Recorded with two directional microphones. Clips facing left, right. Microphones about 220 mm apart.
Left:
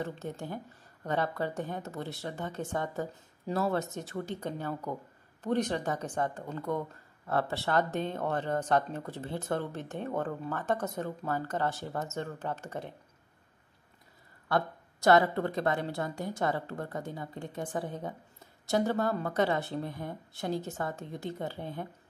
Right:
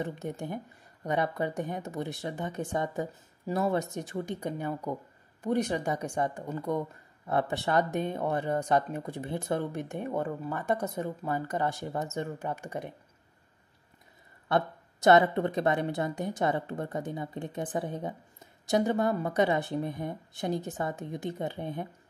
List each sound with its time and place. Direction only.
0.0 s speech: 15° right (ahead or behind)
14.5 s a woman's voice: 20° right (ahead or behind)